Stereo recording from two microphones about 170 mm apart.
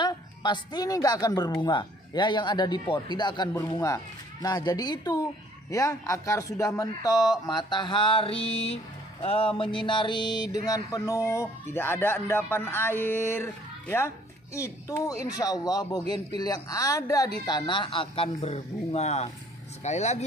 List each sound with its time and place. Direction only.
0.0 s a woman's voice: 25° left (ahead or behind)
9.2 s a sound: 35° left (ahead or behind); by 15.1 s 20° left (ahead or behind)
15.3 s a woman's voice: 20° left (ahead or behind); by 20.2 s 40° left (ahead or behind)